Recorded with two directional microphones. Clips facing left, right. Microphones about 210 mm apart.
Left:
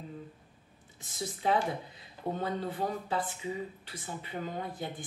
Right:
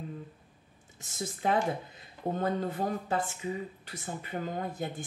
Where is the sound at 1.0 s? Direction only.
45° right (ahead or behind).